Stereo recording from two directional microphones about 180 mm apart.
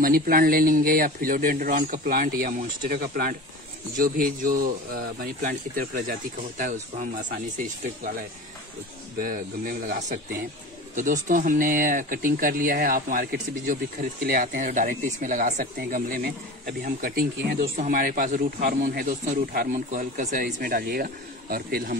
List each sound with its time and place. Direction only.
0.0 s speech: 55° right (ahead or behind)
9.2 s speech: 50° right (ahead or behind)
11.2 s speech: 50° right (ahead or behind)